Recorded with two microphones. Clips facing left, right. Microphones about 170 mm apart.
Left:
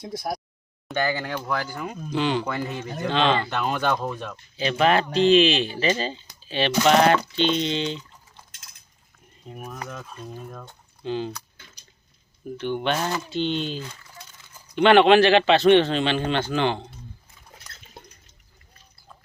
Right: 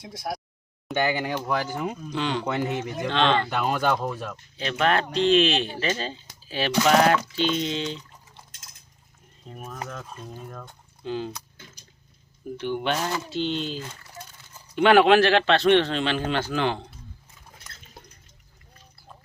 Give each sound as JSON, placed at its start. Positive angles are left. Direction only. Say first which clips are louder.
{"t": 0.0, "sound": "a sound", "louder": "left 3 dB", "side_deg": 40}
{"t": 0.9, "sound": "speech", "louder": "right 1 dB", "side_deg": -15}
{"t": 2.0, "sound": "speech", "louder": "left 6 dB", "side_deg": 5}
{"t": 2.4, "sound": "speech", "louder": "right 2 dB", "side_deg": -20}
{"t": 3.1, "sound": "speech", "louder": "left 1 dB", "side_deg": 5}
{"t": 9.5, "sound": "speech", "louder": "left 1 dB", "side_deg": 5}
{"t": 11.5, "sound": "a sound", "louder": "right 4 dB", "side_deg": -50}
{"t": 12.5, "sound": "speech", "louder": "left 1 dB", "side_deg": -10}
{"t": 14.8, "sound": "speech", "louder": "left 2 dB", "side_deg": -5}